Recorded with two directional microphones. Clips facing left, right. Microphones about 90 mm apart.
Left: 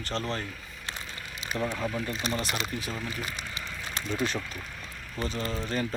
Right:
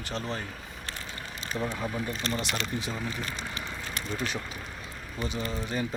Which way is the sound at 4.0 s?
30° left (ahead or behind).